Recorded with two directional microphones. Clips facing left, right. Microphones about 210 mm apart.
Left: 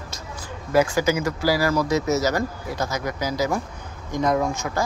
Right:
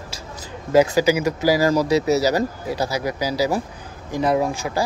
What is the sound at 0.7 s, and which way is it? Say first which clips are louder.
Speech: right 4 dB; 20° right (ahead or behind).